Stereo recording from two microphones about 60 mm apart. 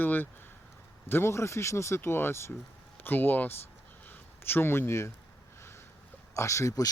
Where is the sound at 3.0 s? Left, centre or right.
Left.